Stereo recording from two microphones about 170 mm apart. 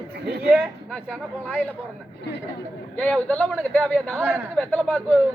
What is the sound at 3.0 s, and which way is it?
Speech, 10° left (ahead or behind).